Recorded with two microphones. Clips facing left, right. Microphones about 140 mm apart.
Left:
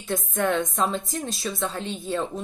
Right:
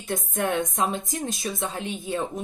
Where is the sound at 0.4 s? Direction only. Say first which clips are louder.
Left 1 dB; 15° right (ahead or behind).